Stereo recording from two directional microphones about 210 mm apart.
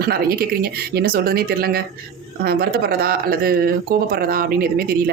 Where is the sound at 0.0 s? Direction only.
45° right (ahead or behind).